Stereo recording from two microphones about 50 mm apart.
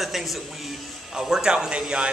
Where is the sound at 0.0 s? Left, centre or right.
Centre.